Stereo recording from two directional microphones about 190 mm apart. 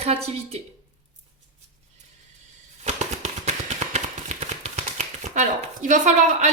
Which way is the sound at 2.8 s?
35° right (ahead or behind).